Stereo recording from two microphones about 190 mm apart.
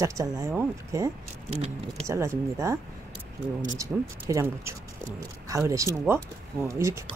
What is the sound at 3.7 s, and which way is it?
Speech, 15° right (ahead or behind).